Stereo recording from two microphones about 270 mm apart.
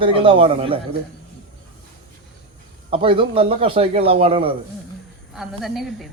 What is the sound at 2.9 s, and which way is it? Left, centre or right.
Speech, centre.